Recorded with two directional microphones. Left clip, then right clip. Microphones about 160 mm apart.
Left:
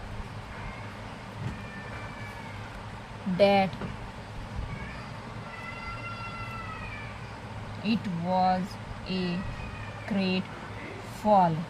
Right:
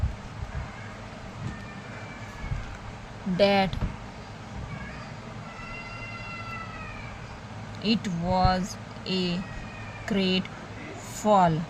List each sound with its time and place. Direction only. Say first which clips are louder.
3.3 s speech: even; 30° right (ahead or behind)
7.9 s speech: right 3 dB; 45° right (ahead or behind)